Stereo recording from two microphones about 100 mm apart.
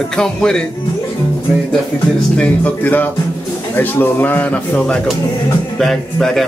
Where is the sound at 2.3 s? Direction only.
15° left (ahead or behind).